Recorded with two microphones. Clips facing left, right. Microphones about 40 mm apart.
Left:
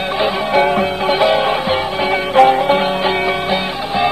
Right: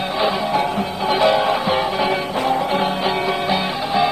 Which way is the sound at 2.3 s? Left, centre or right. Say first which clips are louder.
Left 10 dB; left.